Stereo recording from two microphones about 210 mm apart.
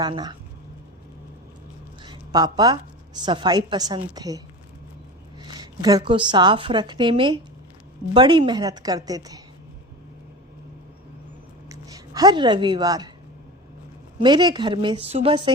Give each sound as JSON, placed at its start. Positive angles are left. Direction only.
{"t": 0.0, "sound": "a woman's voice", "side_deg": -20}
{"t": 2.0, "sound": "a sound", "side_deg": -20}
{"t": 3.2, "sound": "a woman's voice", "side_deg": -20}
{"t": 11.7, "sound": "speech", "side_deg": -15}
{"t": 14.2, "sound": "a woman's voice", "side_deg": -20}